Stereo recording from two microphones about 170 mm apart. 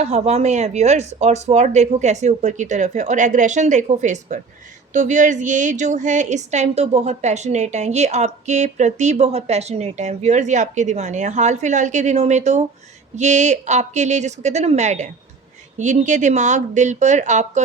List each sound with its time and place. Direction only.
0.0 s a woman's voice: 40° right (ahead or behind)